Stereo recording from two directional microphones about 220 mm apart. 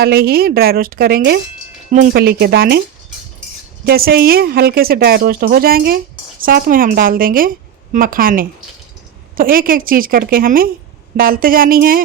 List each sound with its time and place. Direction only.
0.0 s speech: 45° right (ahead or behind)
3.8 s a woman's voice: 45° right (ahead or behind)